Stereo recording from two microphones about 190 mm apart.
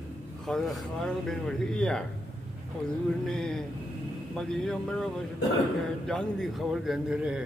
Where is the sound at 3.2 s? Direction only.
5° left (ahead or behind).